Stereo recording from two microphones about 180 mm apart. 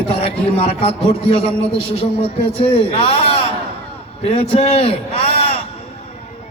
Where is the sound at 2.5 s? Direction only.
35° left (ahead or behind).